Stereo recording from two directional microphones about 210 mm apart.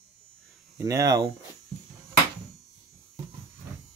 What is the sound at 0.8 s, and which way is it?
Speech, 15° right (ahead or behind).